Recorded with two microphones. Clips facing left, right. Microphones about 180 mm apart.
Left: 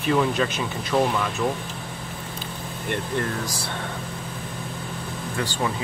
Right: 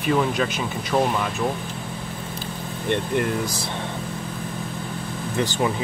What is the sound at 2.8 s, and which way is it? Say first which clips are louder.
Speech: right 4 dB; 20° right (ahead or behind).